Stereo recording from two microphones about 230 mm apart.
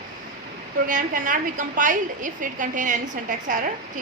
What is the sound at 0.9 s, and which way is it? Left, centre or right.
A woman's voice, right.